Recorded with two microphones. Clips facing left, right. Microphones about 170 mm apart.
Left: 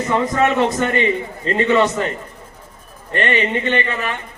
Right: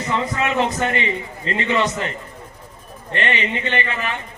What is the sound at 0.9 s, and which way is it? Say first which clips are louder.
A man's voice: left 5 dB; 45° left (ahead or behind).